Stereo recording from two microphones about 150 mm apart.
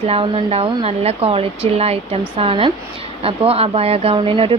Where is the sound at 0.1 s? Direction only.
40° right (ahead or behind).